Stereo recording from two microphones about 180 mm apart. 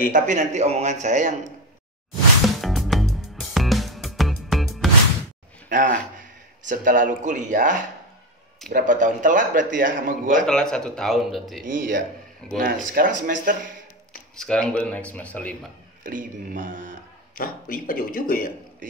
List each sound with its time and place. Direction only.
0.1 s speech: 40° right (ahead or behind)
2.4 s music: centre (ahead or behind)
5.7 s a man's voice: 45° right (ahead or behind)
10.4 s speech: 5° left (ahead or behind)
11.6 s a man's voice: 50° right (ahead or behind)
14.3 s speech: 5° left (ahead or behind)
16.0 s a man's voice: 50° right (ahead or behind)
17.4 s speech: 55° left (ahead or behind)